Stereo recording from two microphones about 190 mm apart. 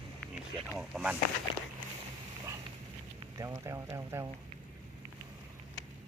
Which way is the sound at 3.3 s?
15° right (ahead or behind).